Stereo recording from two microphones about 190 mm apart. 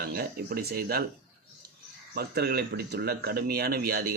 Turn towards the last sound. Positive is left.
turn(degrees=-55)  # may be behind; listen again after turning